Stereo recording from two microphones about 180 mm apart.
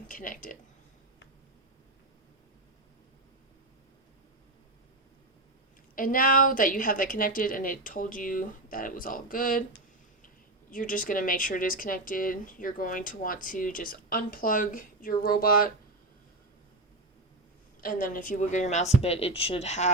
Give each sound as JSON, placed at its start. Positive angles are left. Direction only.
{"t": 0.1, "sound": "speech", "side_deg": 50}
{"t": 6.0, "sound": "speech", "side_deg": 50}
{"t": 17.7, "sound": "a woman's voice", "side_deg": 50}